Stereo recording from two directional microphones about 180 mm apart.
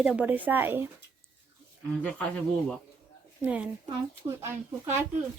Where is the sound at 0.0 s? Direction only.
5° right (ahead or behind).